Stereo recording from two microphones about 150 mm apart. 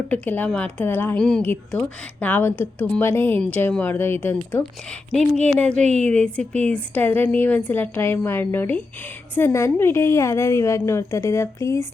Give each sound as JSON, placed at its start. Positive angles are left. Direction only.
{"t": 0.1, "sound": "a woman's voice", "side_deg": 10}